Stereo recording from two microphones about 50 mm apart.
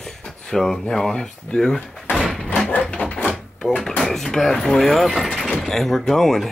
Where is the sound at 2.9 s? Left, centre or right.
Left.